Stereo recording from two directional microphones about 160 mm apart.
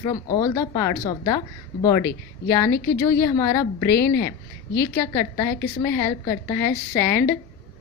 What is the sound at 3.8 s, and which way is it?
Speech, 90° left.